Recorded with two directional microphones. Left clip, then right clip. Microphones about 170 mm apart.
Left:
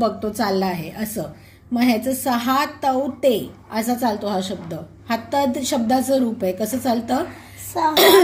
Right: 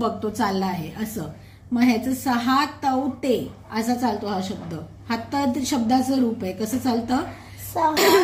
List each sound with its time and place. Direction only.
0.0 s a woman's voice: 25° left (ahead or behind)
7.7 s a child's voice: 10° left (ahead or behind)